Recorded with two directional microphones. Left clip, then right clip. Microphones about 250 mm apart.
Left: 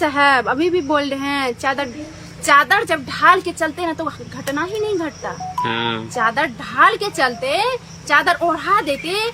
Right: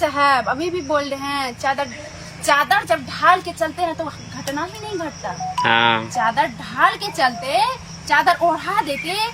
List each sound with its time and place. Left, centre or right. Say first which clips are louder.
0.0 s speech: left 2 dB; left
5.6 s speech: right 8 dB; centre
6.1 s speech: even; left